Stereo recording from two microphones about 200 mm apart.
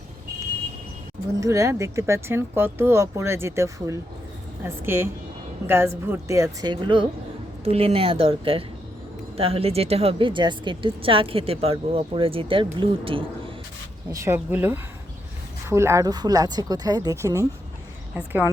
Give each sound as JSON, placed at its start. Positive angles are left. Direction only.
{"t": 1.4, "sound": "speech", "side_deg": -15}
{"t": 14.1, "sound": "speech", "side_deg": -15}